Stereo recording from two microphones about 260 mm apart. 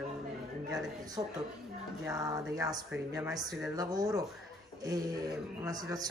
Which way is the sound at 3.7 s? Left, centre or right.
Centre.